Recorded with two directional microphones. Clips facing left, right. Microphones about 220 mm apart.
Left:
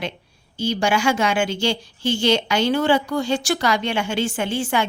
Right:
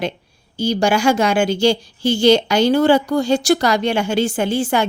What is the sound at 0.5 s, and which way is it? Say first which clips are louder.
A woman's voice: right 4 dB; 40° right (ahead or behind).